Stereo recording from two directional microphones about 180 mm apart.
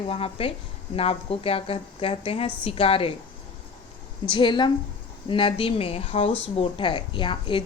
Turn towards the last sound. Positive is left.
turn(degrees=30)  # may be behind; listen again after turning